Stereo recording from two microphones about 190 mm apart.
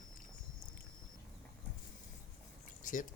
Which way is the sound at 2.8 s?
45° left (ahead or behind).